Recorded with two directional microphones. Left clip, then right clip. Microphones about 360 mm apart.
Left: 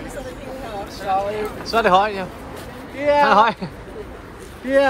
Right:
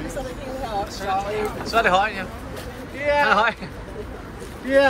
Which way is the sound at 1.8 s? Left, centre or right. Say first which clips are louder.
Left 3 dB; centre.